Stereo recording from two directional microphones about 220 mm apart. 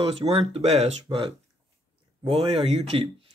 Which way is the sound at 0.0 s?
25° right (ahead or behind).